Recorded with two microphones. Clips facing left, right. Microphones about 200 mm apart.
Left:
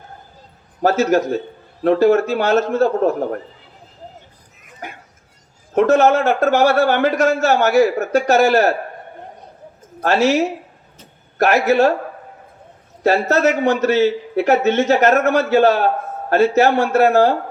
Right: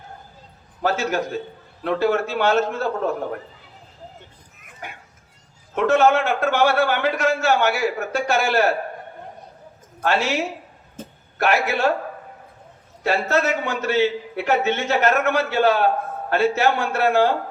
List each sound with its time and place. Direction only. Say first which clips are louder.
0.8 s a man's voice: left 7 dB; 40° left (ahead or behind)
5.7 s a man's voice: left 4 dB; 40° left (ahead or behind)
10.0 s a man's voice: left 6 dB; 40° left (ahead or behind)
11.0 s a sound: right 11 dB; 50° right (ahead or behind)
11.3 s a man's voice: left 7 dB; 40° left (ahead or behind)
13.0 s a man's voice: left 5 dB; 40° left (ahead or behind)